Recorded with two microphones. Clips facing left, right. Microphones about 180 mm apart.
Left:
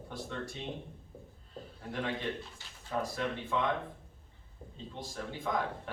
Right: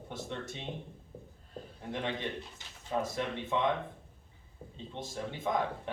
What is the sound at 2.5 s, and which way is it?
Speech, 20° right (ahead or behind).